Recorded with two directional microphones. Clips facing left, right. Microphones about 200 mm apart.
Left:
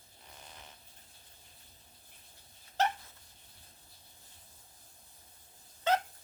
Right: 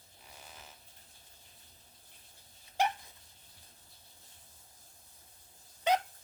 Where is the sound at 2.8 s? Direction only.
10° right (ahead or behind).